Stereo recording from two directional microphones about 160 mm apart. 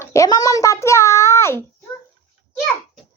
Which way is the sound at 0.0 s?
20° left (ahead or behind).